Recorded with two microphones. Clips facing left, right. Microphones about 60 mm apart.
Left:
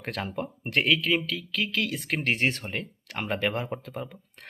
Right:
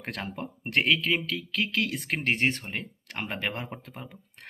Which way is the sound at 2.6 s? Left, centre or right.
Centre.